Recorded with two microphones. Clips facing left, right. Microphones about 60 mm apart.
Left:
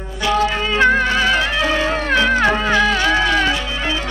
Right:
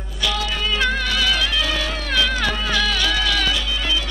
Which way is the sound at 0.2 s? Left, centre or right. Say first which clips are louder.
Left 6 dB; left.